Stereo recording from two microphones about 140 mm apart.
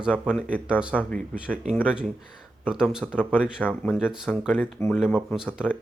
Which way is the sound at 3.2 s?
5° right (ahead or behind).